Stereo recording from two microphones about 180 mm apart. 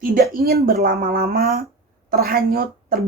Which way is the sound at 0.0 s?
55° right (ahead or behind).